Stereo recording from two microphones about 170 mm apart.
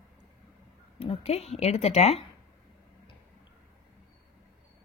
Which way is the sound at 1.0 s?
35° left (ahead or behind).